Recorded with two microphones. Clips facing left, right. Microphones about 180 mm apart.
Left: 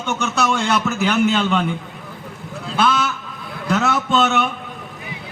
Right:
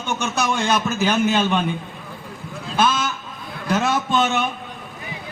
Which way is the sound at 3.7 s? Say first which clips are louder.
Left 1 dB; 20° right (ahead or behind).